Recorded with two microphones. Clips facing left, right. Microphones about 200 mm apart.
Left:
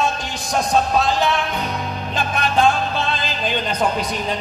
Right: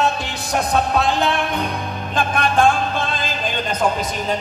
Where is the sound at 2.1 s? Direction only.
50° right (ahead or behind).